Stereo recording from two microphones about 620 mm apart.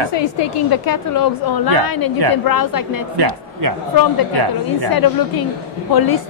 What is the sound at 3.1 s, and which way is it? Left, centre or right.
Speech, right.